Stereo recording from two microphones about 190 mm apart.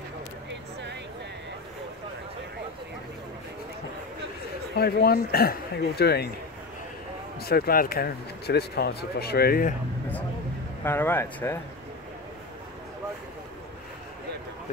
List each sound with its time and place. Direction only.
4.7 s speech: 55° left (ahead or behind)
7.3 s speech: 55° left (ahead or behind)
10.8 s speech: 10° left (ahead or behind)